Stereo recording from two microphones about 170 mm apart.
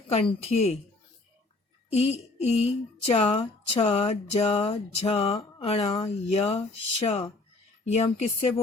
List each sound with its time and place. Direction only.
0.1 s a woman's voice: 35° left (ahead or behind)
1.9 s a woman's voice: 35° left (ahead or behind)